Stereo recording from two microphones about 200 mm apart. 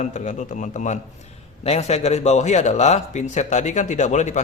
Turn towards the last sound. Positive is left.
turn(degrees=35)  # may be behind; listen again after turning